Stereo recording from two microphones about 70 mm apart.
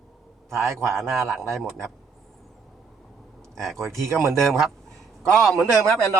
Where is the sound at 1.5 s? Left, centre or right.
Centre.